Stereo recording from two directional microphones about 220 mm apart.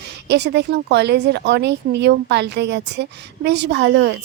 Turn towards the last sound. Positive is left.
turn(degrees=-50)  # may be behind; listen again after turning